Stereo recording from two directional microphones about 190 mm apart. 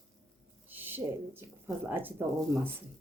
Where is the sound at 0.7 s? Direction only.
10° right (ahead or behind).